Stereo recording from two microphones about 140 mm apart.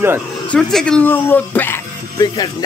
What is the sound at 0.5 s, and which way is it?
Speech, 5° left (ahead or behind).